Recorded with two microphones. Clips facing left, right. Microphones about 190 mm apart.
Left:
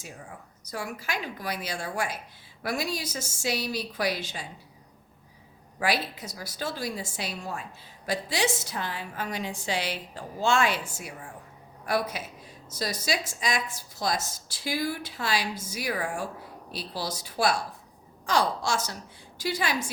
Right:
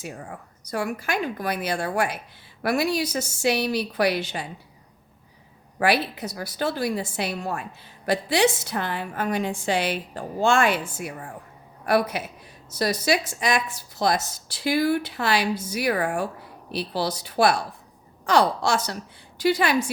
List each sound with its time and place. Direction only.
0.0 s a woman's voice: 65° right (ahead or behind)
5.8 s a woman's voice: 60° right (ahead or behind)